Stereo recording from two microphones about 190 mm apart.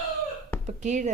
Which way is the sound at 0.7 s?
40° right (ahead or behind).